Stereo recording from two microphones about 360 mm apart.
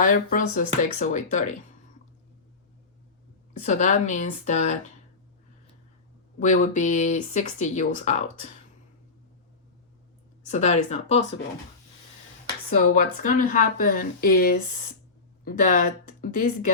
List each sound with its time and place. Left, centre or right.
0.0 s speech: left
3.6 s speech: centre
6.4 s speech: left
10.4 s speech: centre
12.9 s speech: left